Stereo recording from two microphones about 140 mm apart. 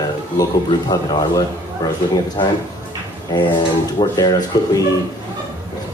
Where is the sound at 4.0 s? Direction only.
30° left (ahead or behind).